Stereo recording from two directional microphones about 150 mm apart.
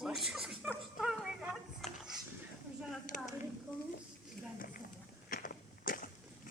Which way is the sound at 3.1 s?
65° left (ahead or behind).